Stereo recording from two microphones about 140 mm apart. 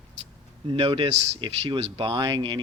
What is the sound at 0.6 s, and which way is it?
Speech, 40° right (ahead or behind).